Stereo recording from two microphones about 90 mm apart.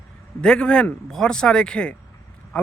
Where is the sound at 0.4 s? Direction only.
10° left (ahead or behind).